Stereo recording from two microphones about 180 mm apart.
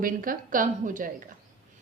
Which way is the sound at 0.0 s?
50° right (ahead or behind).